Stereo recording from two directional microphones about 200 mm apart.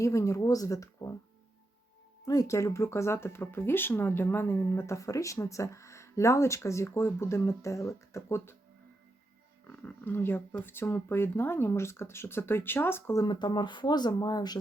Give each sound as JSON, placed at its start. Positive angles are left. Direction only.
{"t": 0.0, "sound": "speech", "side_deg": 15}
{"t": 2.2, "sound": "speech", "side_deg": 20}
{"t": 9.6, "sound": "speech", "side_deg": 10}